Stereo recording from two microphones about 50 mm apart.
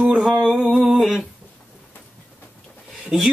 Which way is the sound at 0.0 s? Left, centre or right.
Centre.